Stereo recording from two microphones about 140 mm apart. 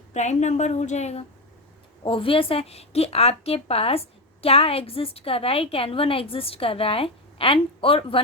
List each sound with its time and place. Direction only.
0.1 s a woman's voice: 55° left (ahead or behind)
2.0 s a woman's voice: 40° left (ahead or behind)